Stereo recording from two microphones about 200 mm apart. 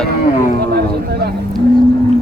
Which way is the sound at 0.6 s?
50° right (ahead or behind).